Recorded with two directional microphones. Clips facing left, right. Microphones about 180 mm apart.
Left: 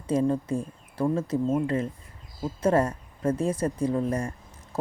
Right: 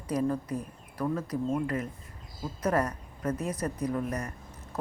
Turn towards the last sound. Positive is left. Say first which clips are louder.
# left 5 dB
turn(degrees=25)  # may be behind; listen again after turning